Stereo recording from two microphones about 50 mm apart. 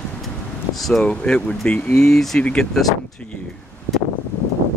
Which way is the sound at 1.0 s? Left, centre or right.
Left.